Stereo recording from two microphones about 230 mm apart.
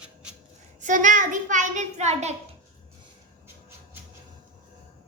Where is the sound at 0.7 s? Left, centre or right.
Right.